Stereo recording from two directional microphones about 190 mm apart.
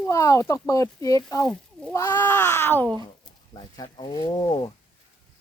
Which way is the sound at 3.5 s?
25° left (ahead or behind).